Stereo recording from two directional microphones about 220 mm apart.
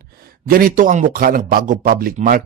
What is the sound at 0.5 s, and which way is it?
Speech, 40° right (ahead or behind).